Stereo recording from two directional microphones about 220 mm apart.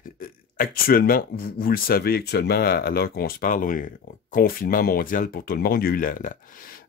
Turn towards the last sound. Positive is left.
turn(degrees=40)  # may be behind; listen again after turning